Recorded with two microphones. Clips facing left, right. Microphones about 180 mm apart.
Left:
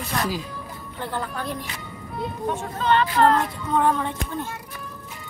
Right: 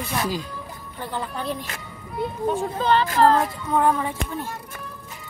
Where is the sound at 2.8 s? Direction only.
35° right (ahead or behind).